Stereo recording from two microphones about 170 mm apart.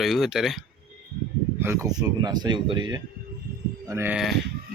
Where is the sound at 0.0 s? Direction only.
Centre (ahead or behind).